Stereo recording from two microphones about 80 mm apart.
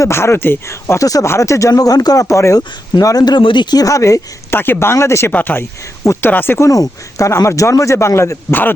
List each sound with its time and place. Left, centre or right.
0.0 s a man's voice: left
2.6 s speech: left
3.8 s speech: left
4.5 s a man's voice: left
5.3 s speech: left
7.2 s a man's voice: left